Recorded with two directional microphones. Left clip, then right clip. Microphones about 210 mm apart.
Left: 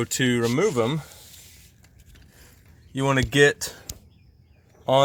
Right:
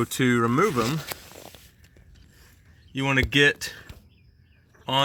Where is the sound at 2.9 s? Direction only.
15° left (ahead or behind).